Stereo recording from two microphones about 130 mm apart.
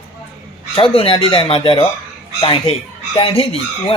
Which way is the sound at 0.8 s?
45° left (ahead or behind).